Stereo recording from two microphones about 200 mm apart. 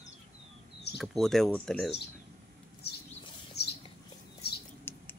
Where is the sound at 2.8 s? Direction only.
55° left (ahead or behind).